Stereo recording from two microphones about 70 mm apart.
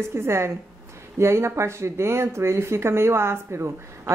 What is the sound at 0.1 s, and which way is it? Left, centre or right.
Speech, right.